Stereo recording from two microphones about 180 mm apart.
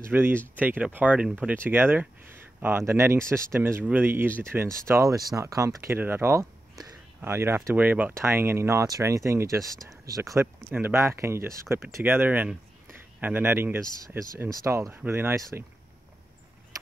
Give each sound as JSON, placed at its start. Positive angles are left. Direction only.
{"t": 0.1, "sound": "speech", "side_deg": -10}